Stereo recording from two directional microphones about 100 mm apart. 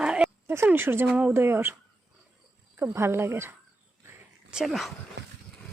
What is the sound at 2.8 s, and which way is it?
Speech, 25° right (ahead or behind).